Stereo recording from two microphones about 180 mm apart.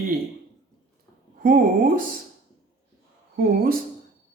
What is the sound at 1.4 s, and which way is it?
Speech, 50° right (ahead or behind).